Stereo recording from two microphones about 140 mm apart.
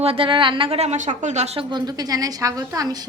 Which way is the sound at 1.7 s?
30° right (ahead or behind).